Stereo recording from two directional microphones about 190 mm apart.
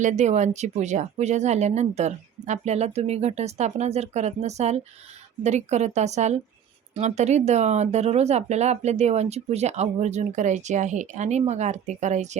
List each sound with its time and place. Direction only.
0.0 s speech: 40° right (ahead or behind)